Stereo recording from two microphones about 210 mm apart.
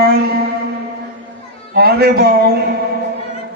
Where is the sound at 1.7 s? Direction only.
50° right (ahead or behind).